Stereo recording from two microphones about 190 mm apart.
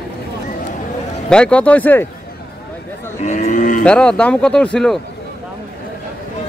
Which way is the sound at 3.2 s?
40° left (ahead or behind).